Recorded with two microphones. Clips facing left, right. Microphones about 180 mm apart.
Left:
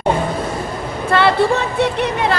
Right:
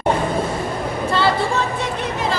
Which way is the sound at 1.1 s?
65° left (ahead or behind).